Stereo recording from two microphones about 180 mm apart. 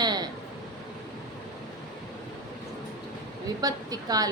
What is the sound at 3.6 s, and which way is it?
Speech, 20° right (ahead or behind).